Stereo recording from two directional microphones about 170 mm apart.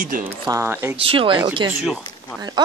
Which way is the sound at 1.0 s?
35° right (ahead or behind).